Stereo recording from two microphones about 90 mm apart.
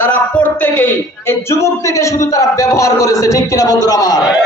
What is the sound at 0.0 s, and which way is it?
Speech, 20° left (ahead or behind).